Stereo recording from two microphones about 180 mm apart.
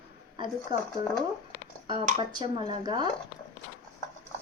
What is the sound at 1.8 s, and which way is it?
Speech, 25° right (ahead or behind).